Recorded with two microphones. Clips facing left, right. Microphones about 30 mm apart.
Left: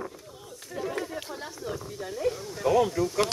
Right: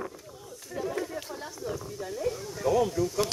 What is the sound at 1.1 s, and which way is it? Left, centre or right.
Speech, centre.